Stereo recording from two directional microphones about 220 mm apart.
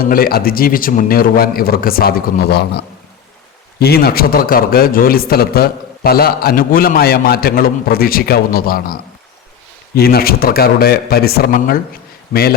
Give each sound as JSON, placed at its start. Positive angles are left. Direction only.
{"t": 0.0, "sound": "a man's voice", "side_deg": 40}